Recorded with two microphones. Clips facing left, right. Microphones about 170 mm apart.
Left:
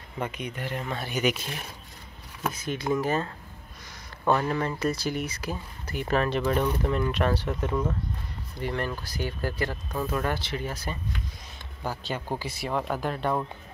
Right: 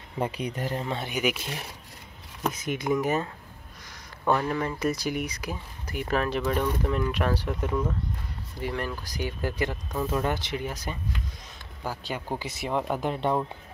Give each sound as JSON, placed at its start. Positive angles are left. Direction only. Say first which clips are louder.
{"t": 0.2, "sound": "speech", "louder": "right 3 dB", "side_deg": -35}
{"t": 0.8, "sound": "speech", "louder": "right 2 dB", "side_deg": -25}
{"t": 1.1, "sound": "speech", "louder": "left 2 dB", "side_deg": -10}
{"t": 2.4, "sound": "speech", "louder": "right 1 dB", "side_deg": -15}
{"t": 4.2, "sound": "speech", "louder": "left 1 dB", "side_deg": 0}
{"t": 4.7, "sound": "speech", "louder": "even", "side_deg": -15}
{"t": 7.4, "sound": "speech", "louder": "even", "side_deg": 5}
{"t": 8.5, "sound": "speech", "louder": "left 1 dB", "side_deg": -10}